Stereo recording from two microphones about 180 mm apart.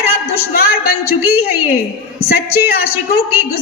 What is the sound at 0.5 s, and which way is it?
A woman's voice, 60° left (ahead or behind).